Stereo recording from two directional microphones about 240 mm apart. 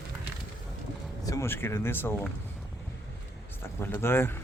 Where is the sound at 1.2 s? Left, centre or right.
Centre.